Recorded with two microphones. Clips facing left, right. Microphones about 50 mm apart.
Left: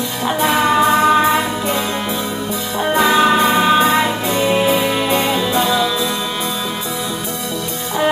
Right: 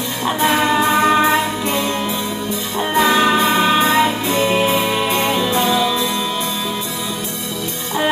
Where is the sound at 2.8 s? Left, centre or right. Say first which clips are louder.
Left 1 dB; centre.